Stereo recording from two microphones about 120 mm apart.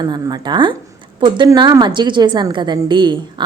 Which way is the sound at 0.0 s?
35° right (ahead or behind).